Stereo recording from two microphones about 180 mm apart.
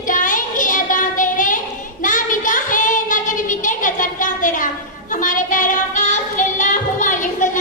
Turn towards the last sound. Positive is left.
turn(degrees=45)  # may be behind; listen again after turning